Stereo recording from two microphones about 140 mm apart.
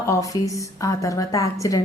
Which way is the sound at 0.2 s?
25° left (ahead or behind).